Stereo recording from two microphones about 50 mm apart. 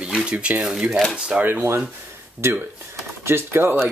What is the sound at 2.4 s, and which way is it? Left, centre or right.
Speech, right.